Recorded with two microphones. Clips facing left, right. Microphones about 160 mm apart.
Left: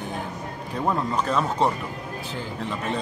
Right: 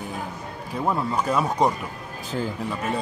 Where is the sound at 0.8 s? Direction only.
10° right (ahead or behind).